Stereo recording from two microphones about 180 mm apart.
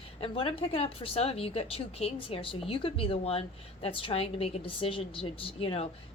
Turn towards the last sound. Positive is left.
turn(degrees=30)  # may be behind; listen again after turning